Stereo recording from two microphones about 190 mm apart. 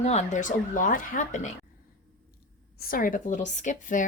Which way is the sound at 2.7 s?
50° left (ahead or behind).